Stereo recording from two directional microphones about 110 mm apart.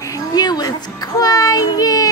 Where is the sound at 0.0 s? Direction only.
35° left (ahead or behind).